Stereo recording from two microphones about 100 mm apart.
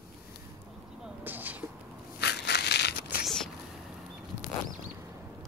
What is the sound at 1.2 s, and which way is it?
Vehicle, 20° right (ahead or behind).